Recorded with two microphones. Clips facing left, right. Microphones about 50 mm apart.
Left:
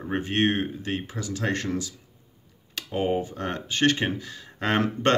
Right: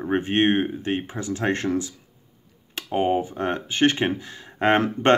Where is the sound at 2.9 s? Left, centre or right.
Right.